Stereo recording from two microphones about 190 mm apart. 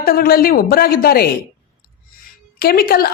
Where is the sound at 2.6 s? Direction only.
50° left (ahead or behind).